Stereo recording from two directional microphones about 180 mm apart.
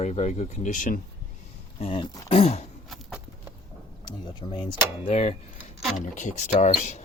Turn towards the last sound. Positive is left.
turn(degrees=40)  # may be behind; listen again after turning